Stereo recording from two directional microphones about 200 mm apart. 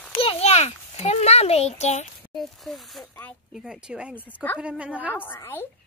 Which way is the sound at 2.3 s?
Centre (ahead or behind).